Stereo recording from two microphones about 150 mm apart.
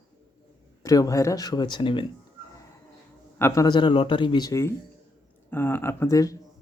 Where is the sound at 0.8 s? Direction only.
20° left (ahead or behind).